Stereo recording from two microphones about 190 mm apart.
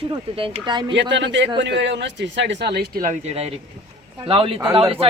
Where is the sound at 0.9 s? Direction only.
70° right (ahead or behind).